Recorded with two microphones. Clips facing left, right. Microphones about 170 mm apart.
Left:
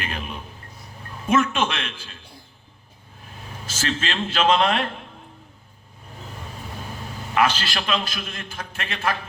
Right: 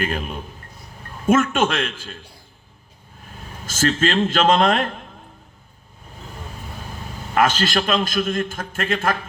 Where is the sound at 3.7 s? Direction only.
45° right (ahead or behind).